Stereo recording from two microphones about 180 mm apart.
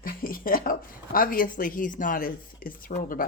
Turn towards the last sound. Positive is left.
turn(degrees=50)  # may be behind; listen again after turning